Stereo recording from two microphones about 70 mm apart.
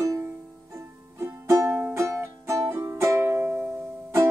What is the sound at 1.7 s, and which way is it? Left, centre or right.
Music, right.